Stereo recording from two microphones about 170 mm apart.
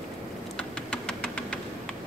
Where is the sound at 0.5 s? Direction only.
5° left (ahead or behind).